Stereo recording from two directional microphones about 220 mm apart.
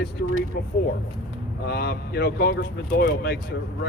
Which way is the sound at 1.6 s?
45° left (ahead or behind).